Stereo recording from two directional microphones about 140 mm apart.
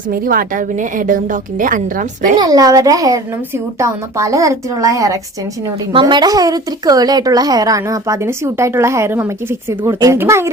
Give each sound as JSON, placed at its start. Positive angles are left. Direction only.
{"t": 0.1, "sound": "a woman's voice", "side_deg": -90}
{"t": 2.4, "sound": "a woman's voice", "side_deg": -25}
{"t": 5.9, "sound": "a woman's voice", "side_deg": -35}